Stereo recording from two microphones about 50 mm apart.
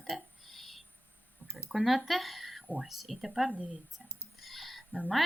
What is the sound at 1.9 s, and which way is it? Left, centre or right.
A woman's voice, centre.